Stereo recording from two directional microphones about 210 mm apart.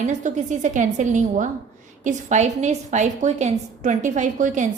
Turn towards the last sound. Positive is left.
turn(degrees=-35)  # may be behind; listen again after turning